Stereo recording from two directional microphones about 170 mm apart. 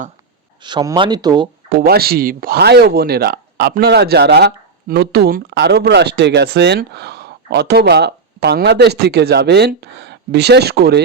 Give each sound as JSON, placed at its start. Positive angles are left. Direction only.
{"t": 0.6, "sound": "speech", "side_deg": -25}
{"t": 1.7, "sound": "speech", "side_deg": -60}